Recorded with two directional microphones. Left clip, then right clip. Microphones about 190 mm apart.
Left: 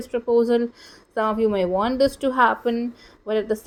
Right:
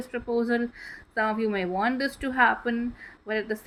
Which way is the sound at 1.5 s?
10° left (ahead or behind).